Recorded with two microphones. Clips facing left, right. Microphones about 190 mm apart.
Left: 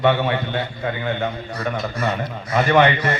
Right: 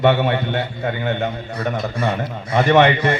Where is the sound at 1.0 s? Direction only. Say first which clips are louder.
Right 2 dB; 25° right (ahead or behind).